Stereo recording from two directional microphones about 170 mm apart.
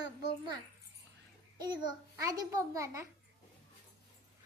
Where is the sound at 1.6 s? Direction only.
25° right (ahead or behind).